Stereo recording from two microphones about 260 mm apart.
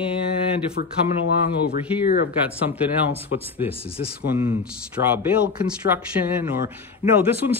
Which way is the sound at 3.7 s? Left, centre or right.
Left.